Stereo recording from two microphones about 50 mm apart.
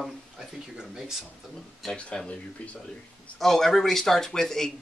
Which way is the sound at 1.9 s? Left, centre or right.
Left.